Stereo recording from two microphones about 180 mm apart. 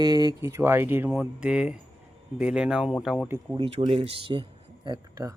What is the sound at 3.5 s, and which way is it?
Speech, 30° right (ahead or behind).